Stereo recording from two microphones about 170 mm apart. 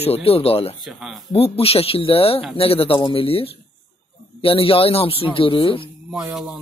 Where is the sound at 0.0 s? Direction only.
35° left (ahead or behind).